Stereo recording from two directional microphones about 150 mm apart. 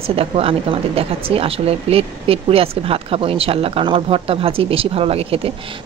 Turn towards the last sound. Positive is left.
turn(degrees=-40)  # may be behind; listen again after turning